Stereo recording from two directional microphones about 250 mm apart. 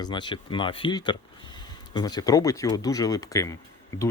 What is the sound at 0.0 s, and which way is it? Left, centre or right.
Speech, centre.